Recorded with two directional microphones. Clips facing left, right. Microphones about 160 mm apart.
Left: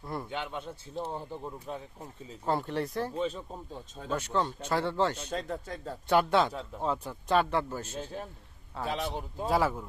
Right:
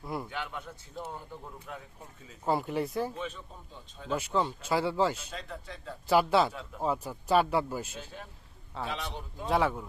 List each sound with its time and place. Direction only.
0.0 s speech: 5° right (ahead or behind)
0.3 s speech: 20° left (ahead or behind)
2.4 s speech: 5° right (ahead or behind)
3.2 s a man's voice: 35° left (ahead or behind)
4.1 s speech: 5° right (ahead or behind)
5.3 s speech: 45° left (ahead or behind)
6.1 s speech: 5° right (ahead or behind)
8.9 s a man's voice: 40° left (ahead or behind)
9.5 s speech: centre (ahead or behind)